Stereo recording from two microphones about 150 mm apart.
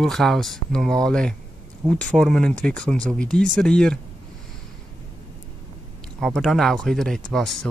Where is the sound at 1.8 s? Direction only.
30° right (ahead or behind).